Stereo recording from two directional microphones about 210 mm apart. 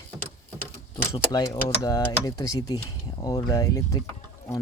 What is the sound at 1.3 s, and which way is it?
Speech, 15° left (ahead or behind).